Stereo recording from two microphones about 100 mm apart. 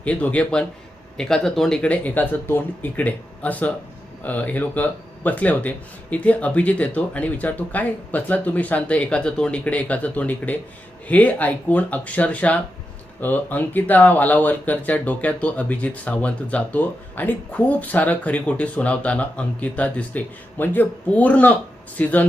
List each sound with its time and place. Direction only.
0.0 s speech: 15° left (ahead or behind)